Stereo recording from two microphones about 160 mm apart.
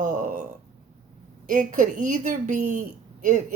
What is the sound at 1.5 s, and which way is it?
A woman's voice, 55° right (ahead or behind).